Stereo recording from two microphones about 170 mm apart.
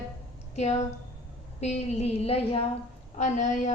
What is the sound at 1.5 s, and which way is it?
A woman's voice, 40° left (ahead or behind).